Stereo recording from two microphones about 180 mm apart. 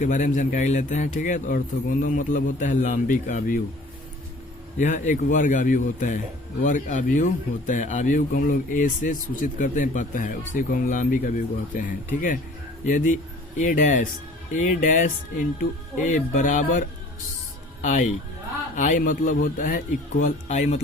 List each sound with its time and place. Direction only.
0.0 s a man's voice: 45° left (ahead or behind)
4.8 s a man's voice: 45° left (ahead or behind)
17.8 s a man's voice: 45° left (ahead or behind)